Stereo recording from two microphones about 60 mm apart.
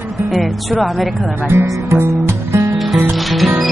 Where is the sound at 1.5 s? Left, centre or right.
Right.